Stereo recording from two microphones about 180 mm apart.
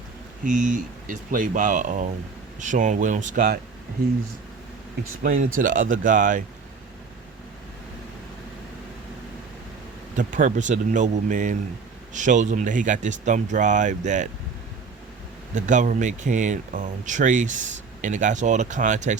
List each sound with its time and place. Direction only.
0.4 s speech: 45° right (ahead or behind)
5.4 s speech: 50° right (ahead or behind)
10.2 s speech: 45° right (ahead or behind)
15.5 s speech: 45° right (ahead or behind)